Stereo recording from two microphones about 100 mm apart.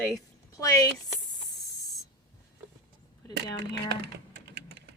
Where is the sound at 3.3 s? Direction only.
45° left (ahead or behind).